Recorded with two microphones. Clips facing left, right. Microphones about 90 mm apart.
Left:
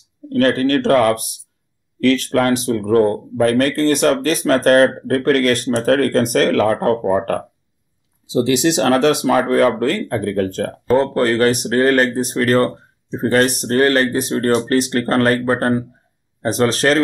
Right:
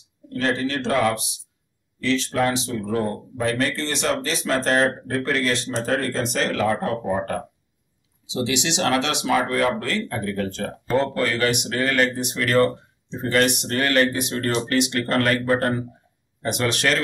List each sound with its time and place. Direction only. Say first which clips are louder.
0.3 s speech: left 9 dB; 60° left (ahead or behind)
8.3 s speech: left 9 dB; 45° left (ahead or behind)